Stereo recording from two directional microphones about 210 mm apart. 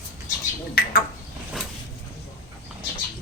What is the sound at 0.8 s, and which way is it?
Bird, 45° left (ahead or behind).